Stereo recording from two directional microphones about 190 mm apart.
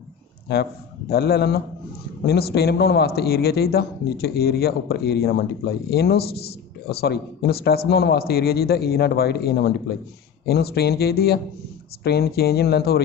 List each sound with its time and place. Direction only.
0.4 s a man's voice: 60° left (ahead or behind)